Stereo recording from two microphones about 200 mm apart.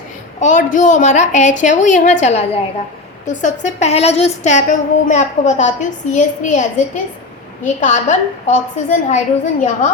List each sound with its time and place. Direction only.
0.3 s speech: 40° left (ahead or behind)